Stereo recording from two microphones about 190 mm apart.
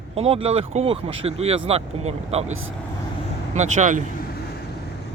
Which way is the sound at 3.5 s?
40° right (ahead or behind).